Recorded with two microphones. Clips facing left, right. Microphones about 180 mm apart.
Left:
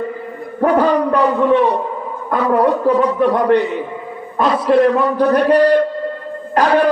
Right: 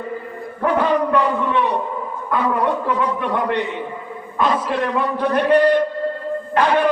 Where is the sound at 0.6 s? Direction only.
40° left (ahead or behind).